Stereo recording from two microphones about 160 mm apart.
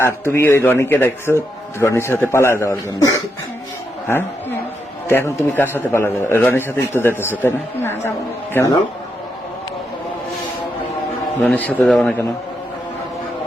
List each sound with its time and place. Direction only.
0.0 s a man's voice: 15° left (ahead or behind)
5.0 s a man's voice: 15° left (ahead or behind)
11.3 s a man's voice: 10° left (ahead or behind)